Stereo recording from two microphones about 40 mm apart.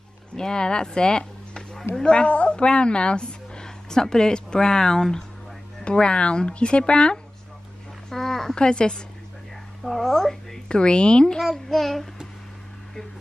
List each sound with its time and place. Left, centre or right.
0.4 s a woman's voice: left
8.1 s a sound: centre
8.5 s speech: left
9.8 s speech: centre
10.7 s speech: left
11.5 s child singing: centre